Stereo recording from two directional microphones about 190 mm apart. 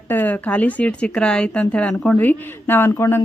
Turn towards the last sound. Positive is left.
turn(degrees=10)  # may be behind; listen again after turning